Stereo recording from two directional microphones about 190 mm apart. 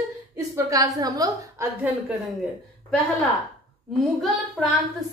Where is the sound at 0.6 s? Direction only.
20° right (ahead or behind).